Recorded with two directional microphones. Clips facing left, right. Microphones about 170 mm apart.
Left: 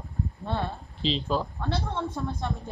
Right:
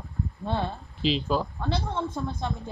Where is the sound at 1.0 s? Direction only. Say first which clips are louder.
Right 2 dB; 5° right (ahead or behind).